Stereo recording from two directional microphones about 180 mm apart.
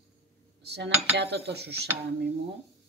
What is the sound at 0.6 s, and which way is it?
Cutlery, 65° right (ahead or behind).